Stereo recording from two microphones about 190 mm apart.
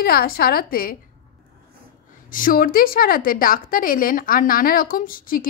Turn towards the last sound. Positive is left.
turn(degrees=50)  # may be behind; listen again after turning